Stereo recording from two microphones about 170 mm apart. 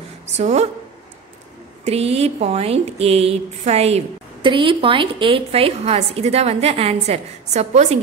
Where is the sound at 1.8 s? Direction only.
35° right (ahead or behind).